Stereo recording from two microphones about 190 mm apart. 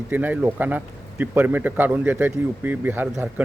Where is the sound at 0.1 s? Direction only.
10° right (ahead or behind).